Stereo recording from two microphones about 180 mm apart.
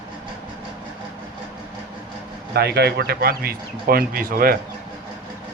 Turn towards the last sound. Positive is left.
turn(degrees=-55)  # may be behind; listen again after turning